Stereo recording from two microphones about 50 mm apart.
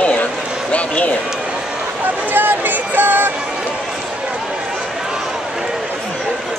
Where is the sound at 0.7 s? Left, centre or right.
Left.